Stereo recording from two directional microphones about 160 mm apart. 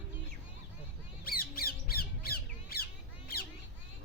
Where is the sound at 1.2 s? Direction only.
70° left (ahead or behind).